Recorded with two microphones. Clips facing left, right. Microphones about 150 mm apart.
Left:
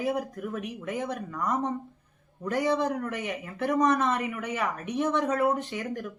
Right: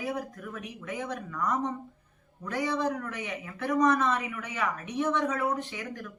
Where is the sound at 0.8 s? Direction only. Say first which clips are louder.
Left 2 dB; 45° left (ahead or behind).